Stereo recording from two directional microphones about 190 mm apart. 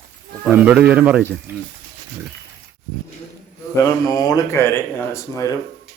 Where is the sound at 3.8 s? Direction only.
20° left (ahead or behind).